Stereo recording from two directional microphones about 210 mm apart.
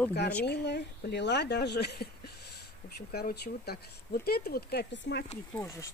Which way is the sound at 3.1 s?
50° left (ahead or behind).